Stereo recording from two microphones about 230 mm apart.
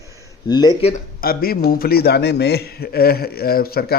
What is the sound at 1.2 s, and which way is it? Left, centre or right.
A man's voice, left.